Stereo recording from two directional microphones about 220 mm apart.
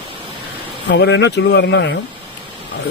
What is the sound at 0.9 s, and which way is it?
Speech, 50° left (ahead or behind).